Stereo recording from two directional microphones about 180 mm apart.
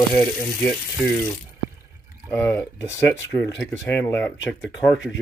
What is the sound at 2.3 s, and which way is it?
Speech, 15° left (ahead or behind).